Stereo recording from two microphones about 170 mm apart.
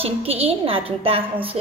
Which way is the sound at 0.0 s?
35° right (ahead or behind).